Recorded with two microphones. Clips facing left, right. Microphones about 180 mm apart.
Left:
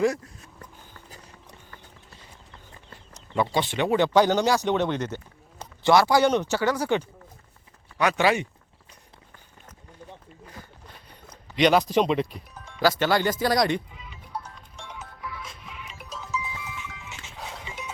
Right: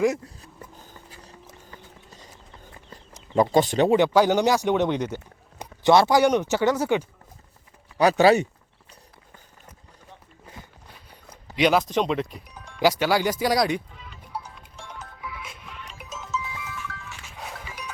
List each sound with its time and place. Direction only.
3.3 s speech: 40° right (ahead or behind)
3.8 s speech: 20° right (ahead or behind)
7.9 s speech: 35° right (ahead or behind)
11.5 s speech: 5° right (ahead or behind)
12.8 s speech: 10° right (ahead or behind)
13.9 s music: 5° left (ahead or behind)
16.3 s music: 15° left (ahead or behind)
17.5 s dog: 20° left (ahead or behind)